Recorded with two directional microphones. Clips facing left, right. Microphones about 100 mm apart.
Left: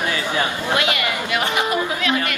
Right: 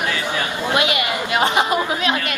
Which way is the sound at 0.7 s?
20° right (ahead or behind).